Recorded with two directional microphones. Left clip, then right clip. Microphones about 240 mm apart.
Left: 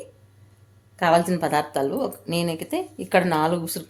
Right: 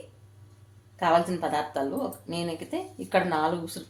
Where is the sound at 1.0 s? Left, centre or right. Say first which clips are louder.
Left 4 dB; left.